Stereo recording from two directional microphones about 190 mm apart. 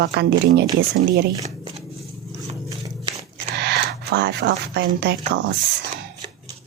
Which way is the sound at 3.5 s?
60° right (ahead or behind).